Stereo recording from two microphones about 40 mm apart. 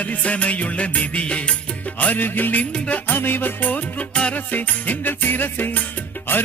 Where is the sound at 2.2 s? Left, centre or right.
Left.